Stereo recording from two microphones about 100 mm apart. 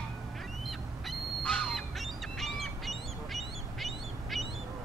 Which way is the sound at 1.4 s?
10° left (ahead or behind).